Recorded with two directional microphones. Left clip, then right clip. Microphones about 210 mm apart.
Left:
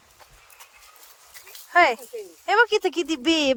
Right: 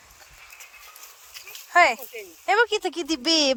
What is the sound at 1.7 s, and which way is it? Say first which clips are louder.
Speech: even; 20° left (ahead or behind).